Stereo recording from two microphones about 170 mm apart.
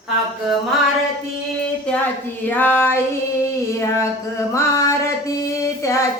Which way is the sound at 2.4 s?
10° left (ahead or behind).